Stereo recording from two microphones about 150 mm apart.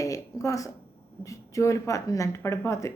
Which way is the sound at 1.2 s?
20° left (ahead or behind).